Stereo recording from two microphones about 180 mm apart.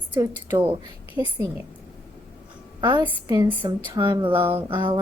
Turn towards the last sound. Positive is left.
turn(degrees=-25)  # may be behind; listen again after turning